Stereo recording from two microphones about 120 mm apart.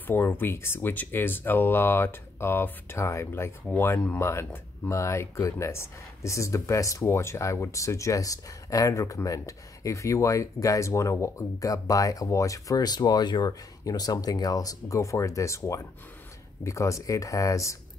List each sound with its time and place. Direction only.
0.0 s speech: 15° left (ahead or behind)